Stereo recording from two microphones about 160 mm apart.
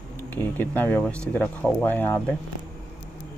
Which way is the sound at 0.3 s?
10° left (ahead or behind).